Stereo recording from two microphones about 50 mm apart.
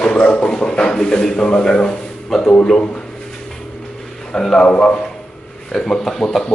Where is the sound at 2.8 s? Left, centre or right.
Left.